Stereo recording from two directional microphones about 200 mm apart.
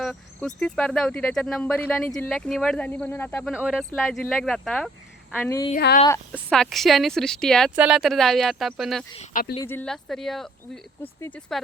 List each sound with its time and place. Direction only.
0.0 s speech: 5° left (ahead or behind)
3.5 s speech: 5° right (ahead or behind)
9.3 s speech: 50° left (ahead or behind)
9.6 s speech: 5° left (ahead or behind)